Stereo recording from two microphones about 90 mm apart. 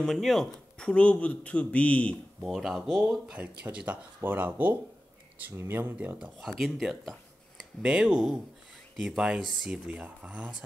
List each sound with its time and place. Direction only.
0.0 s speech: centre (ahead or behind)
2.4 s speech: centre (ahead or behind)
6.4 s speech: centre (ahead or behind)
9.8 s speech: 10° right (ahead or behind)